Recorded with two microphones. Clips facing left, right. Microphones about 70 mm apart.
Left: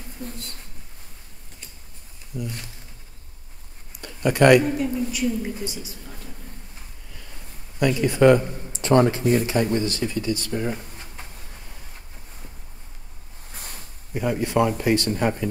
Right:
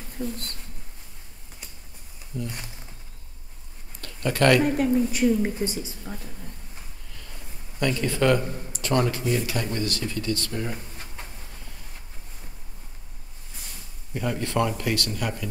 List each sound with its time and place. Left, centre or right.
0.2 s a woman's voice: right
2.3 s speech: centre
4.0 s speech: centre
4.7 s a woman's voice: right
7.8 s a man's voice: centre
13.5 s a sound: left
14.1 s a man's voice: centre